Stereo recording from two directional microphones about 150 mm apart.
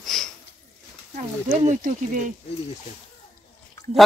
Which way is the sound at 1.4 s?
55° right (ahead or behind).